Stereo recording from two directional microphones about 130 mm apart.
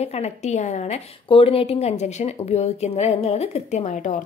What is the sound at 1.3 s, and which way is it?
A woman's voice, 45° left (ahead or behind).